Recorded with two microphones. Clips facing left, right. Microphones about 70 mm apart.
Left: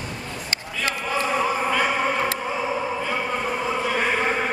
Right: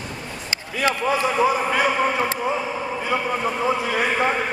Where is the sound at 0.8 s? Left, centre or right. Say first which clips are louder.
Right 5 dB; centre.